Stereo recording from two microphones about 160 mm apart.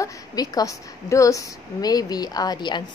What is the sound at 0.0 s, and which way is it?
A woman's voice, 20° left (ahead or behind).